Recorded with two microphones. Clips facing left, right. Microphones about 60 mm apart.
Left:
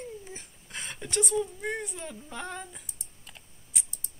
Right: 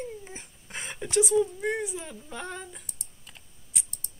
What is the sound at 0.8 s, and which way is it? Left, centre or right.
Speech, centre.